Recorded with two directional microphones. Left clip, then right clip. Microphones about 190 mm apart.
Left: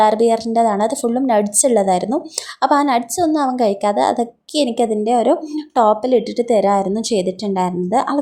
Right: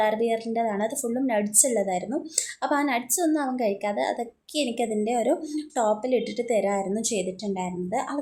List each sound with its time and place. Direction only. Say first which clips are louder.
0.0 s a woman's voice: left 10 dB; 35° left (ahead or behind)